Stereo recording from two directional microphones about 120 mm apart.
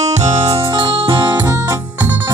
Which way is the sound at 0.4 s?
50° right (ahead or behind).